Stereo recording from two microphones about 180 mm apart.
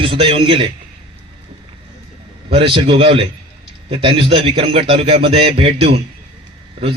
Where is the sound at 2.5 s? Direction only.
30° right (ahead or behind).